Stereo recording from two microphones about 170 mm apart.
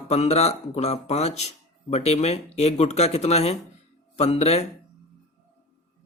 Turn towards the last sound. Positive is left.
turn(degrees=40)  # may be behind; listen again after turning